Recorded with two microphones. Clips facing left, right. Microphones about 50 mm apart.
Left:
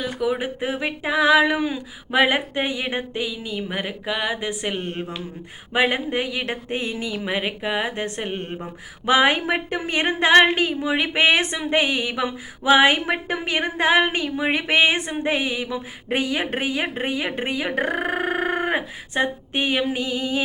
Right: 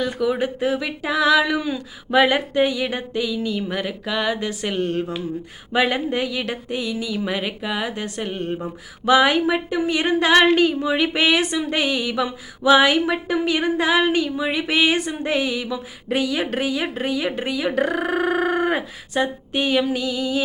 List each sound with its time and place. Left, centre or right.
0.0 s speech: centre; by 20.4 s left